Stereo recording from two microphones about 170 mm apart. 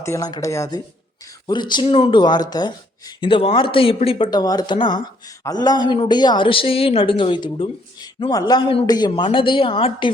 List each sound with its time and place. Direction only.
0.0 s speech: 20° left (ahead or behind)